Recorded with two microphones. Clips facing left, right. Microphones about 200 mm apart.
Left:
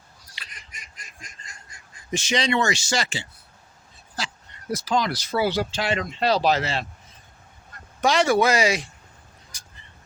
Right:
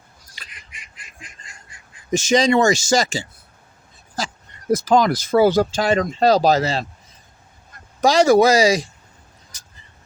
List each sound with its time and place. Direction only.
0.4 s duck: 45° right (ahead or behind)
0.7 s duck: 45° left (ahead or behind)
2.0 s speech: 45° right (ahead or behind)
4.2 s a sound: 45° right (ahead or behind)
4.7 s speech: 50° right (ahead or behind)
8.0 s speech: 40° right (ahead or behind)
9.5 s vehicle: 10° left (ahead or behind)